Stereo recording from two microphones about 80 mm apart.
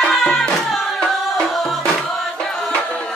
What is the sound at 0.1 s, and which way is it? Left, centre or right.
Music, centre.